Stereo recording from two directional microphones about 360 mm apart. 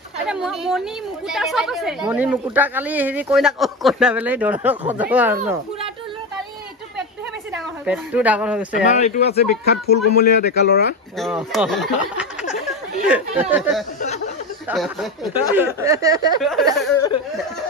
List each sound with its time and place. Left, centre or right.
0.3 s a woman's voice: centre
7.8 s a woman's voice: centre
8.7 s speech: centre
11.1 s a woman's voice: centre
14.0 s a sound: centre
14.7 s a woman's voice: centre
16.3 s a woman's voice: centre